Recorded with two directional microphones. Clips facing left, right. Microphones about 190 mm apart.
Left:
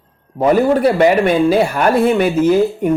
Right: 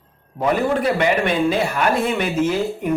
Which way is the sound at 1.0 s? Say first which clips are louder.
Left 7 dB; 40° left (ahead or behind).